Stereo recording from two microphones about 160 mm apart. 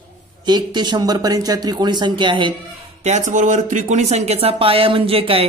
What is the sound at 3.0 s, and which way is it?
Speech, 50° right (ahead or behind).